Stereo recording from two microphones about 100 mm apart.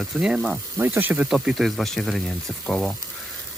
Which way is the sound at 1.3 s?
5° right (ahead or behind).